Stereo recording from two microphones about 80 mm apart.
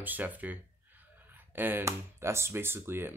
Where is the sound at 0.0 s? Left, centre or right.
Right.